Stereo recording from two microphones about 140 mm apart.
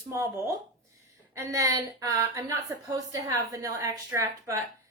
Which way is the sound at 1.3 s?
25° right (ahead or behind).